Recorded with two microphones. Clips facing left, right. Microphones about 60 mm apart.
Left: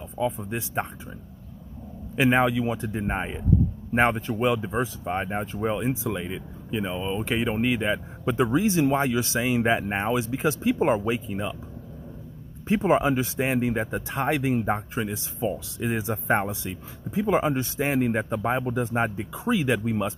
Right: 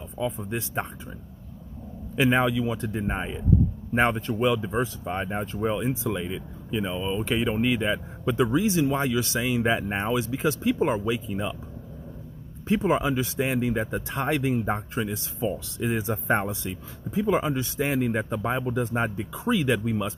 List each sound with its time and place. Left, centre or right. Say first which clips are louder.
0.2 s speech: left 2 dB; centre
2.2 s speech: left 1 dB; centre
8.4 s speech: left 1 dB; left
9.7 s speech: left 1 dB; centre; by 11.3 s left
12.6 s speech: left 2 dB; left
15.5 s speech: even; centre
17.4 s speech: left 2 dB; left